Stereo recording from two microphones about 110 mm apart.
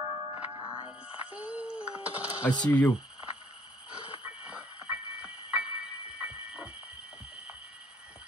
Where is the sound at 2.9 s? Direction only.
10° right (ahead or behind).